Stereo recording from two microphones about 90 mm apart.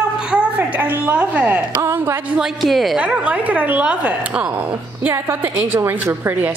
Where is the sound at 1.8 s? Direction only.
30° right (ahead or behind).